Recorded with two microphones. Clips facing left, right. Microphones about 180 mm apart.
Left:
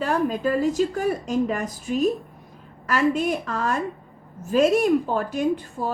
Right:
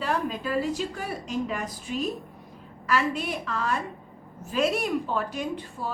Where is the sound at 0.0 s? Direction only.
45° left (ahead or behind).